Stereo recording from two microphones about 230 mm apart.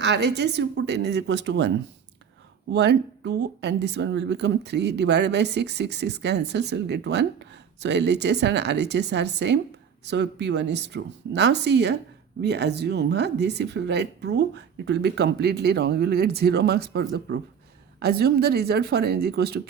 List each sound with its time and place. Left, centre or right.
0.0 s a woman's voice: right
2.7 s a woman's voice: right